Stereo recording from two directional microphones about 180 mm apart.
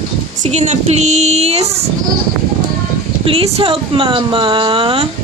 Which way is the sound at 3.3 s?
35° right (ahead or behind).